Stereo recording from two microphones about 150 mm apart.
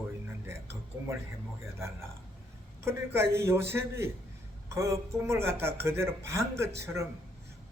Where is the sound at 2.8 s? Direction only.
15° right (ahead or behind).